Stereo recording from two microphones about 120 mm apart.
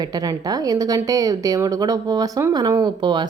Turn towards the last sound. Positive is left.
turn(degrees=-40)  # may be behind; listen again after turning